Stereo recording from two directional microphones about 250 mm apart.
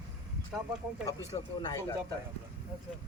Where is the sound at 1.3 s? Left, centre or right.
Left.